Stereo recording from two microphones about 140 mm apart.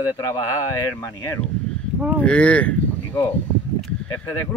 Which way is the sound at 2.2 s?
10° left (ahead or behind).